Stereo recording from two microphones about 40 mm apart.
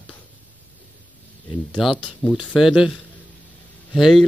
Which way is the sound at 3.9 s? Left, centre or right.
Centre.